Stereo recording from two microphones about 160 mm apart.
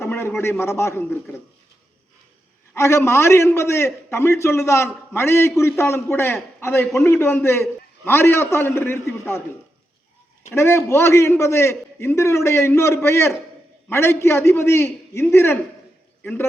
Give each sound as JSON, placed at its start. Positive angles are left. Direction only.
{"t": 0.0, "sound": "a sound", "side_deg": 15}
{"t": 0.6, "sound": "a man's voice", "side_deg": 15}
{"t": 2.7, "sound": "a man's voice", "side_deg": 15}
{"t": 10.5, "sound": "a man's voice", "side_deg": 15}